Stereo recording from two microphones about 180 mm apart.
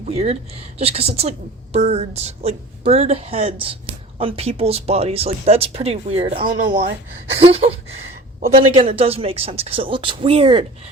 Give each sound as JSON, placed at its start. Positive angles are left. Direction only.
{"t": 0.0, "sound": "a woman's voice", "side_deg": -35}